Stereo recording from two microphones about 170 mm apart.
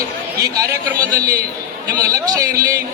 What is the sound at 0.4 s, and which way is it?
Speech, 20° right (ahead or behind).